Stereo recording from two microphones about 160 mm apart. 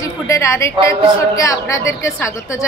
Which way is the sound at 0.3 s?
20° left (ahead or behind).